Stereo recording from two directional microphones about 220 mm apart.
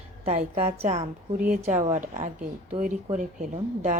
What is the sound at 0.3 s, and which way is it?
A woman's voice, 30° right (ahead or behind).